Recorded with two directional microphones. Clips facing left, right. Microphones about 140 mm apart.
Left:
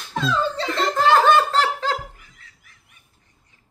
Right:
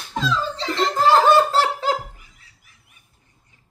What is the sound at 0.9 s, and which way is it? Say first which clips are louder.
Giggle: right 1 dB; 5° right (ahead or behind).